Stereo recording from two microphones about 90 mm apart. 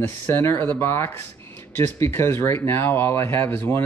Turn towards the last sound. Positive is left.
turn(degrees=25)  # may be behind; listen again after turning